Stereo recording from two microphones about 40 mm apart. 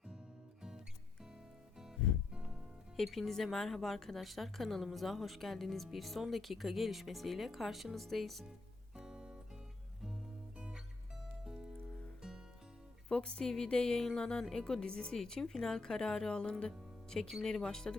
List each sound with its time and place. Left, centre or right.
2.9 s speech: centre
9.0 s music: centre
13.1 s speech: left